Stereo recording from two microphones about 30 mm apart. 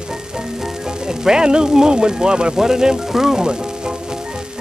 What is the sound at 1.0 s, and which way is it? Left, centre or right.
Speech, right.